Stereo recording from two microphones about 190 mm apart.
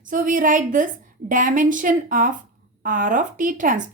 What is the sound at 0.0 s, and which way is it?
Speech, 45° right (ahead or behind).